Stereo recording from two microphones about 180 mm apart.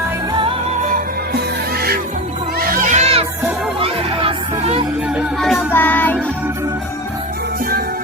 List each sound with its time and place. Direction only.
0.8 s music: 45° right (ahead or behind)
2.6 s music: 50° right (ahead or behind); by 4.9 s 30° right (ahead or behind)
5.0 s music: centre (ahead or behind)
5.7 s child singing: 10° left (ahead or behind)